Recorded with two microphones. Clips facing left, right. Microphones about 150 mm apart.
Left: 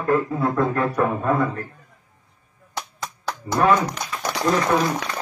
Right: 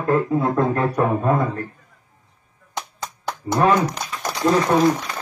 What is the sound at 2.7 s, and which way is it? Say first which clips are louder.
Finger snapping: right 1 dB; 20° right (ahead or behind).